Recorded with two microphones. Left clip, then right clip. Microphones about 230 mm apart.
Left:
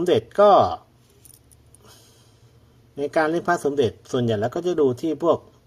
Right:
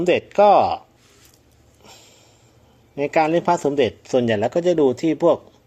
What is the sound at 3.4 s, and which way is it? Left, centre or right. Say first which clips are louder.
Speech: right 3 dB; right.